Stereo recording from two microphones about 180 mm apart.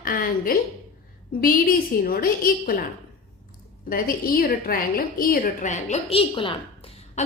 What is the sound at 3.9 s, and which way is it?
A woman's voice, 55° left (ahead or behind).